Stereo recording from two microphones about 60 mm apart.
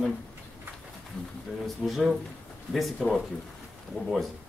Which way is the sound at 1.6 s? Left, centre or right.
Centre.